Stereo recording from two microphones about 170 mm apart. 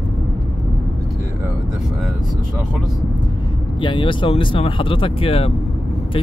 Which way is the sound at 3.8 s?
30° left (ahead or behind).